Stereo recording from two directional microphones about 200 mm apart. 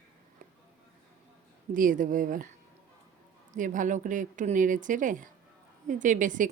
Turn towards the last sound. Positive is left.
turn(degrees=-40)  # may be behind; listen again after turning